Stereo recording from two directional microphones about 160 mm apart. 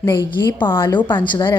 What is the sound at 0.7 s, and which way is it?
Speech, 30° left (ahead or behind).